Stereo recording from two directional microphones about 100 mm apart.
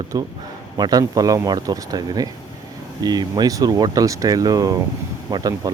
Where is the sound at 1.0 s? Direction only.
35° right (ahead or behind).